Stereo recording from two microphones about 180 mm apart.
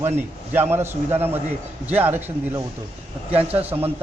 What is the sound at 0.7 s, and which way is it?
A man's voice, 10° right (ahead or behind).